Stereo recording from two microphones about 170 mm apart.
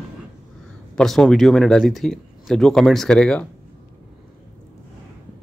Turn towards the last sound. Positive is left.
turn(degrees=5)  # may be behind; listen again after turning